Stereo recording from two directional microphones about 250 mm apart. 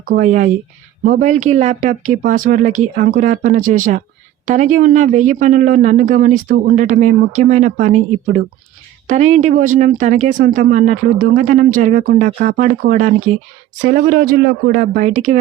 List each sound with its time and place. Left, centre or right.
0.1 s speech: right